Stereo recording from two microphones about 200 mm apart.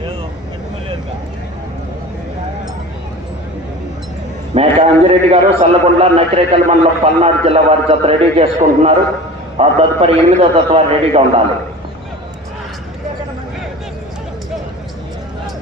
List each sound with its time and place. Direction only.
4.5 s a man's voice: 30° right (ahead or behind)